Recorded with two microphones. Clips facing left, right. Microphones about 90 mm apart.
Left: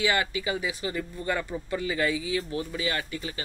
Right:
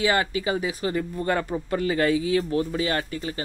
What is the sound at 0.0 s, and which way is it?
Speech, 35° right (ahead or behind).